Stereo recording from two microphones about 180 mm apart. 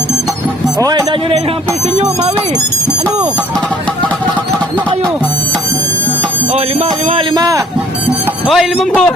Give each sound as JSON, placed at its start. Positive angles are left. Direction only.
{"t": 7.3, "sound": "speech", "side_deg": -20}
{"t": 8.4, "sound": "a man's voice", "side_deg": 0}